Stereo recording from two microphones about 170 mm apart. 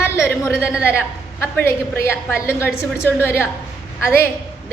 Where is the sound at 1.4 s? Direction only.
15° left (ahead or behind).